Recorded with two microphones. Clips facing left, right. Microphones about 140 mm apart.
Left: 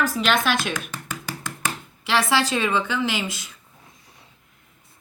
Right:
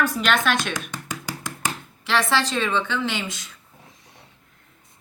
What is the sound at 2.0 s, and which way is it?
A woman's voice, 5° left (ahead or behind).